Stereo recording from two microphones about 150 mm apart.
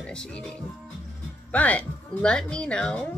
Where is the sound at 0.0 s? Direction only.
5° left (ahead or behind).